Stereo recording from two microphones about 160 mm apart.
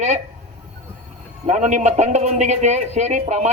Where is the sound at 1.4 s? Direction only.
45° right (ahead or behind).